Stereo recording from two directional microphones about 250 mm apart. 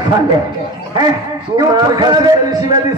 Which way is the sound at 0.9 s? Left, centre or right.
Centre.